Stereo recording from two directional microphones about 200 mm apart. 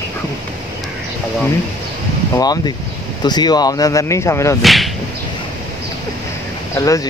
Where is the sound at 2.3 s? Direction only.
20° left (ahead or behind).